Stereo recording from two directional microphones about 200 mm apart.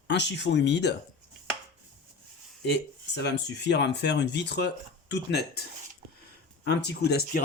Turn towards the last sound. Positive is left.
turn(degrees=50)  # may be behind; listen again after turning